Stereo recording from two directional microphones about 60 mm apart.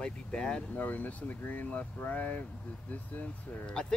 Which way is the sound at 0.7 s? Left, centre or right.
Left.